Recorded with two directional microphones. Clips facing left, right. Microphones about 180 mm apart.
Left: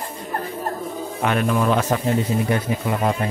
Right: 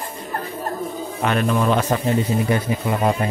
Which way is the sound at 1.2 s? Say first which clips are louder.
Even; 10° left (ahead or behind).